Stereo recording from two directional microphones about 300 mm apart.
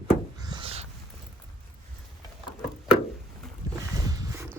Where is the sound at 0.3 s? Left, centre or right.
Centre.